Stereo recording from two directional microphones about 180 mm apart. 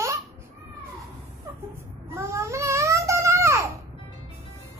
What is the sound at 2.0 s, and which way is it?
Babbling, 15° right (ahead or behind).